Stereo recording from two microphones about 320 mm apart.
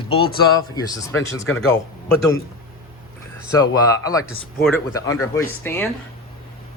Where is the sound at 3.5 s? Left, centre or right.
Centre.